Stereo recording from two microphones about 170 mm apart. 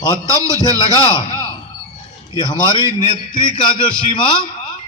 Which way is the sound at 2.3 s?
25° left (ahead or behind).